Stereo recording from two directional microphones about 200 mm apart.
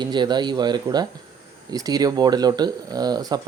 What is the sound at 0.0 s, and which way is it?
Speech, 20° right (ahead or behind).